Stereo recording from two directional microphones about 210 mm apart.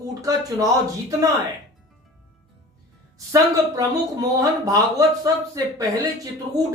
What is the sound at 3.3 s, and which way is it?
Speech, 15° right (ahead or behind).